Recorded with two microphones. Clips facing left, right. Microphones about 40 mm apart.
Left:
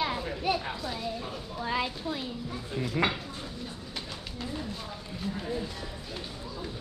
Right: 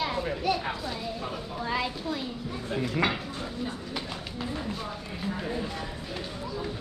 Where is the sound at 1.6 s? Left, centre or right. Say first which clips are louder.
Even; centre.